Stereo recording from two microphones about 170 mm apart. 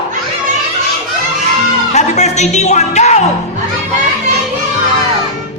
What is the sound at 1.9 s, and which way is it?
Music, 40° left (ahead or behind).